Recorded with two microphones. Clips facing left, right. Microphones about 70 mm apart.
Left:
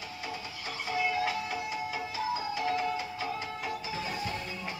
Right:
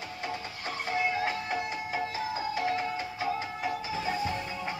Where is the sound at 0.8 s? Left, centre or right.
Right.